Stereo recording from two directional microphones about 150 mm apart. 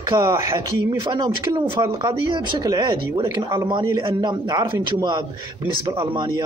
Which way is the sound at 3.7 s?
35° right (ahead or behind).